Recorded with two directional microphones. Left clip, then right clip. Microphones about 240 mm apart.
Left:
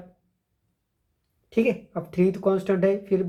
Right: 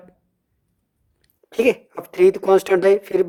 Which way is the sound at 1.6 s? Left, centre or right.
Right.